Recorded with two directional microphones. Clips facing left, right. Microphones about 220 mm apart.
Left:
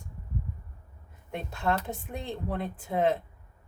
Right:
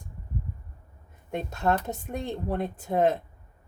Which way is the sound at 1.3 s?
45° right (ahead or behind).